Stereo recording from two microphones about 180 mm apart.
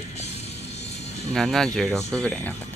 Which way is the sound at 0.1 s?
35° left (ahead or behind).